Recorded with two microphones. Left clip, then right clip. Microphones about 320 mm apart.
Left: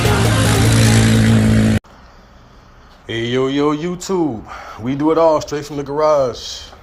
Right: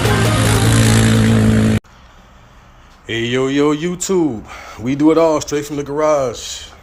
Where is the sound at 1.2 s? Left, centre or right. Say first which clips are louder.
Right 1 dB; centre.